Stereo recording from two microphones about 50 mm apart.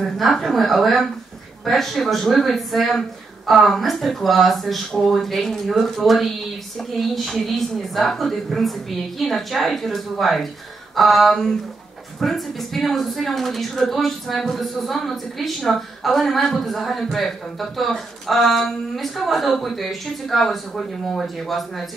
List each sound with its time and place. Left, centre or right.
0.0 s speech: centre